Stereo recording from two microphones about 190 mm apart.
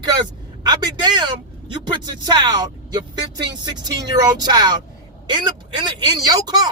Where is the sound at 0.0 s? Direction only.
20° right (ahead or behind).